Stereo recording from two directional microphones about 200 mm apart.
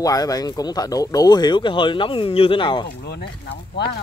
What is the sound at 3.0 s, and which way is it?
Speech, 55° left (ahead or behind).